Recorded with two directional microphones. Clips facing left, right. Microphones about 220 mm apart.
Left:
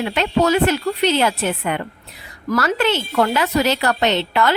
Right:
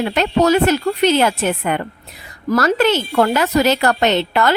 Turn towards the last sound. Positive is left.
turn(degrees=-45)  # may be behind; listen again after turning